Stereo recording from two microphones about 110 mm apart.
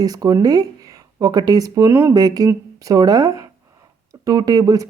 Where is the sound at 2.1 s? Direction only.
35° right (ahead or behind).